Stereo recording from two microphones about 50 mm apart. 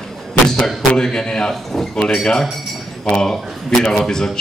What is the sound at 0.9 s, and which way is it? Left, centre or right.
Speech, centre.